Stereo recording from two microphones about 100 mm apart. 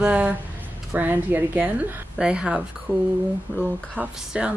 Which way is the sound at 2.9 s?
20° right (ahead or behind).